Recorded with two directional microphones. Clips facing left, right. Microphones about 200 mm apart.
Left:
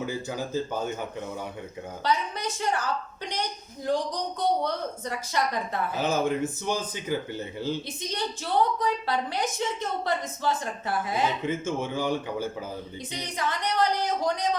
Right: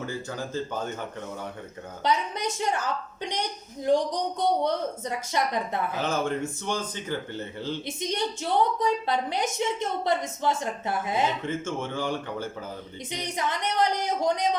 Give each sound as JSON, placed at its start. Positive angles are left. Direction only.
{"t": 0.0, "sound": "speech", "side_deg": 10}
{"t": 2.0, "sound": "a woman's voice", "side_deg": -20}
{"t": 4.6, "sound": "a woman's voice", "side_deg": -20}
{"t": 6.0, "sound": "speech", "side_deg": 5}
{"t": 7.9, "sound": "a woman's voice", "side_deg": -25}
{"t": 11.4, "sound": "speech", "side_deg": 10}
{"t": 13.1, "sound": "a woman's voice", "side_deg": -20}